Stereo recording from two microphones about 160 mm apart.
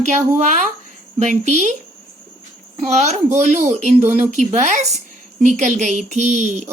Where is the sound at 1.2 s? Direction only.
45° right (ahead or behind).